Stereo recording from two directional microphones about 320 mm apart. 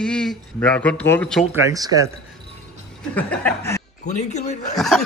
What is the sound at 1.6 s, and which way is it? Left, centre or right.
Speech, centre.